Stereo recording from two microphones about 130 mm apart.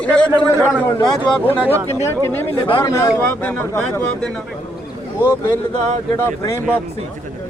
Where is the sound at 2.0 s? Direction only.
15° left (ahead or behind).